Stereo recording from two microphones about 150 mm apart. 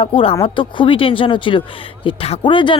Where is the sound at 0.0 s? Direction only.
40° left (ahead or behind).